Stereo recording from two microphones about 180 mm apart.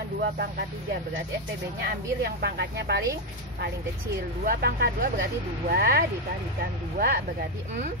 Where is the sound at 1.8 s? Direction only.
60° right (ahead or behind).